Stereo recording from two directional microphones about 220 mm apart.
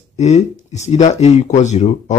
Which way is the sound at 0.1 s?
30° left (ahead or behind).